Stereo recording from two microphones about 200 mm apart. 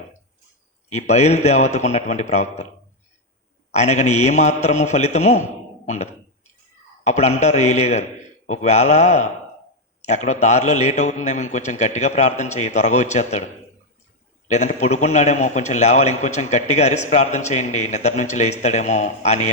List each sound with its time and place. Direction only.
0.9 s a man's voice: 35° left (ahead or behind)
3.7 s a man's voice: 35° left (ahead or behind)
14.4 s a man's voice: 35° left (ahead or behind)